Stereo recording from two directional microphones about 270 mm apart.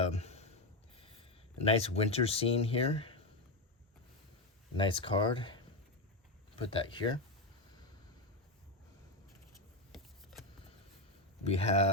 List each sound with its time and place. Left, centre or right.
0.0 s a sound: left
0.9 s speech: left
4.8 s speech: centre
11.4 s speech: left